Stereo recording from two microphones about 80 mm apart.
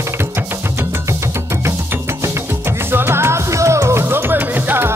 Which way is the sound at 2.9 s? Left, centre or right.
Right.